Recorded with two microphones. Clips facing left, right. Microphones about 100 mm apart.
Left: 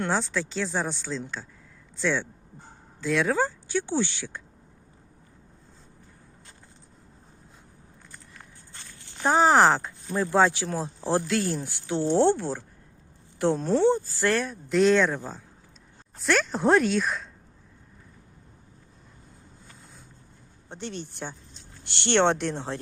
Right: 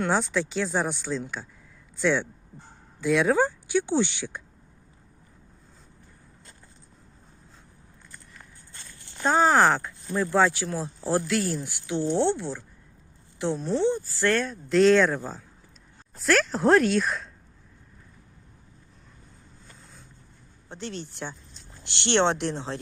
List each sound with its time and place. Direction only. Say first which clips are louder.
0.1 s speech: right 2 dB; 10° right (ahead or behind)
9.2 s speech: left 1 dB; 20° left (ahead or behind); by 12.1 s 35° left (ahead or behind)
12.1 s speech: left 5 dB; 50° left (ahead or behind)
14.2 s speech: right 1 dB; 20° left (ahead or behind)
14.4 s speech: right 4 dB; 5° left (ahead or behind)
21.0 s speech: even; 35° left (ahead or behind)
22.1 s speech: left 1 dB; 55° left (ahead or behind)